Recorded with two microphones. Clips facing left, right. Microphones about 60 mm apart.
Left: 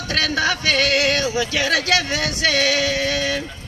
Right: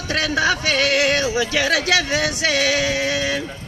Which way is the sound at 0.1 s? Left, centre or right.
Right.